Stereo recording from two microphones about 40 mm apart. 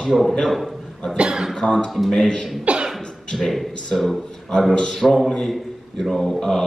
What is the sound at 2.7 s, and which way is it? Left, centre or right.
Cough, right.